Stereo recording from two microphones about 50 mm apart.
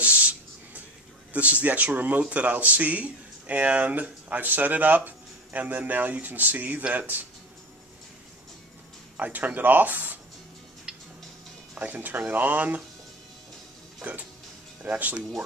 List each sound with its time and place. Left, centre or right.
0.0 s a sound: right
1.3 s speech: right
9.1 s speech: right
10.9 s music: centre
11.8 s speech: right
14.0 s a sound: right
14.8 s speech: right